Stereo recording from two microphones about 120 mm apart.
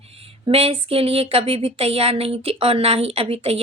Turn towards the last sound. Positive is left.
turn(degrees=-55)  # may be behind; listen again after turning